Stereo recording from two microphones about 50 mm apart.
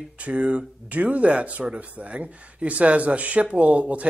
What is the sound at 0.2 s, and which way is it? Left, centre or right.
Speech, right.